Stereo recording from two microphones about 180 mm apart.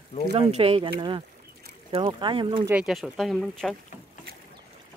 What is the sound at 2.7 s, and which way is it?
Speech, 5° right (ahead or behind).